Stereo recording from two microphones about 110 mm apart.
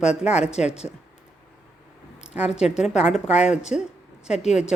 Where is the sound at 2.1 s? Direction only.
10° right (ahead or behind).